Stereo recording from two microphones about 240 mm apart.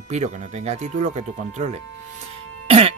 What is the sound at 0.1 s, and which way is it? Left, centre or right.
Speech, right.